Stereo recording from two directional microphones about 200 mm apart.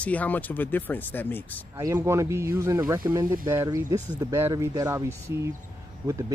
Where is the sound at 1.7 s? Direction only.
15° right (ahead or behind).